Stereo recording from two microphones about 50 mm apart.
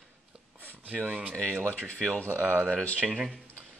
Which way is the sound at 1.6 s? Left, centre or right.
Left.